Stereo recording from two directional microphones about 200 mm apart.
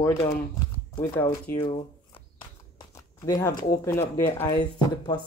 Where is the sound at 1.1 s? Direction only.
15° left (ahead or behind).